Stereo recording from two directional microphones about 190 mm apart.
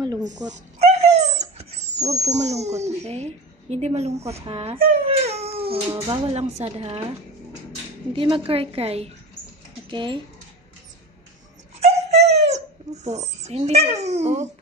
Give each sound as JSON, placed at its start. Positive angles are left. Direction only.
{"t": 0.2, "sound": "dog", "side_deg": -40}
{"t": 3.7, "sound": "a woman's voice", "side_deg": -35}
{"t": 4.8, "sound": "a sound", "side_deg": -35}
{"t": 6.2, "sound": "a woman's voice", "side_deg": -30}
{"t": 8.1, "sound": "a woman's voice", "side_deg": -25}
{"t": 11.8, "sound": "a sound", "side_deg": -35}